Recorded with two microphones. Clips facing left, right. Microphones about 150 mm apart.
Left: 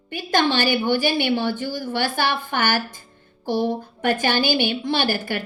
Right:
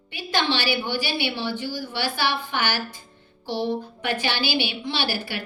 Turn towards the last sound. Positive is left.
turn(degrees=50)  # may be behind; listen again after turning